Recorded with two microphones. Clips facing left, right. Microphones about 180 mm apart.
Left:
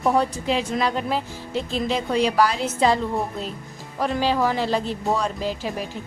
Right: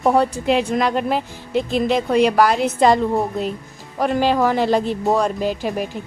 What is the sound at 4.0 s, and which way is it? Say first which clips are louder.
Speech: right 4 dB; 55° right (ahead or behind).